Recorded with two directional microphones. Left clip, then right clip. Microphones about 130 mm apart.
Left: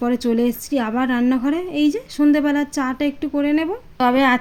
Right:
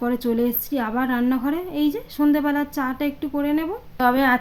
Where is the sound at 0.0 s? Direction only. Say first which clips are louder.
Left 3 dB; 25° left (ahead or behind).